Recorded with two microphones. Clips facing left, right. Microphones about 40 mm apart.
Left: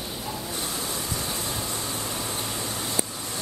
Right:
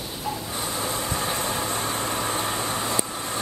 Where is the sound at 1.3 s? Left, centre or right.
Right.